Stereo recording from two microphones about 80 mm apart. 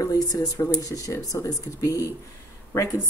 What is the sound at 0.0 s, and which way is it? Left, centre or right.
A woman's voice, left.